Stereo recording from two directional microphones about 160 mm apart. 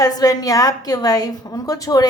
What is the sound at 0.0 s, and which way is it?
A woman's voice, 20° left (ahead or behind).